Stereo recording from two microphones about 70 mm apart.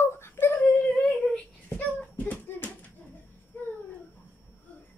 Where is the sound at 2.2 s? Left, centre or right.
Left.